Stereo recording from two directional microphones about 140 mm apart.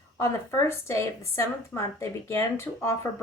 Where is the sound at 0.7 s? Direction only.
20° left (ahead or behind).